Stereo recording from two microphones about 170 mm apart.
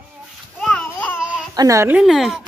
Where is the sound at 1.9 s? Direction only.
Centre (ahead or behind).